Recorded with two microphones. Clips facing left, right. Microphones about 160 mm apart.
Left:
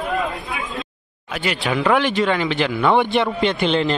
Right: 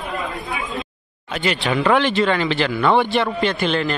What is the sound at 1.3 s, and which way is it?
Speech, 5° left (ahead or behind).